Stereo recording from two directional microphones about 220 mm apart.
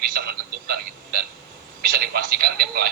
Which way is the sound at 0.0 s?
45° right (ahead or behind).